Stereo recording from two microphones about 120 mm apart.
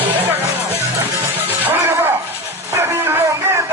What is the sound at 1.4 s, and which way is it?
Music, 15° right (ahead or behind).